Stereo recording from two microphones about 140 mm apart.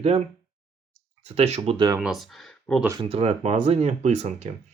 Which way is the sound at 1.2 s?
50° right (ahead or behind).